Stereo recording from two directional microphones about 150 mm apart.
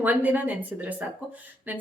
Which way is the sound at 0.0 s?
10° right (ahead or behind).